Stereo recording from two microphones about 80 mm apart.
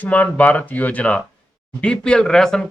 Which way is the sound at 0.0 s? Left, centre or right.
Centre.